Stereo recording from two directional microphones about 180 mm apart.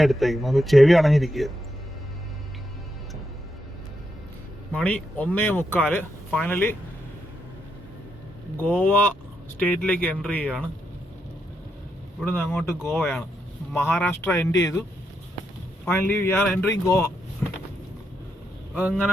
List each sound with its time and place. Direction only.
0.0 s speech: centre (ahead or behind)
4.7 s speech: 5° left (ahead or behind)
8.5 s speech: 10° left (ahead or behind)
12.2 s speech: 10° left (ahead or behind)
15.9 s speech: 10° left (ahead or behind)
18.7 s speech: 5° right (ahead or behind)